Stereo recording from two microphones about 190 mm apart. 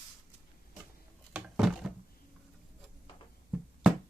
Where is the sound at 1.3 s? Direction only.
Centre (ahead or behind).